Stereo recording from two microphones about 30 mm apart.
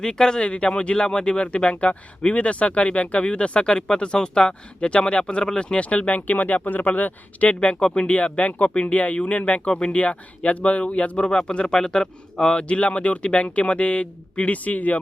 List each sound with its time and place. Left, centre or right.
0.0 s speech: left
0.4 s speech: left
5.6 s speech: left
6.8 s speech: left
7.4 s speech: left
7.8 s speech: left
8.1 s speech: left
9.0 s speech: left
11.3 s speech: left
12.6 s speech: left